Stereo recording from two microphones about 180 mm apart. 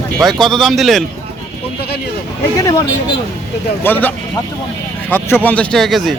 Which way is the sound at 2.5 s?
20° left (ahead or behind).